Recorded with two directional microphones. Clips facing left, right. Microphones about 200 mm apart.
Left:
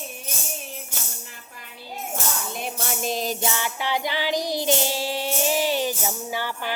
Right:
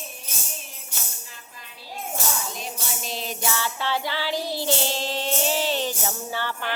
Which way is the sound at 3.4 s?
20° left (ahead or behind).